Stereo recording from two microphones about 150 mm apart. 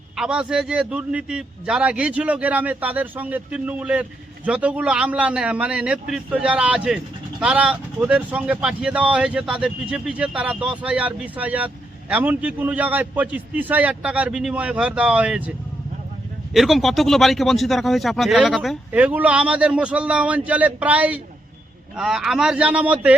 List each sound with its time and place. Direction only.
0.2 s a man's voice: 5° right (ahead or behind)
18.9 s a man's voice: 10° right (ahead or behind)